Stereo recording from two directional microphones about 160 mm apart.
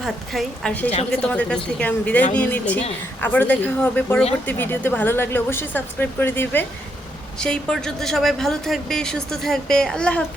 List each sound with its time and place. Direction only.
0.0 s a woman's voice: 5° left (ahead or behind)